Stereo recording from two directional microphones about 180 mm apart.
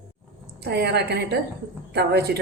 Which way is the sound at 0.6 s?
65° right (ahead or behind).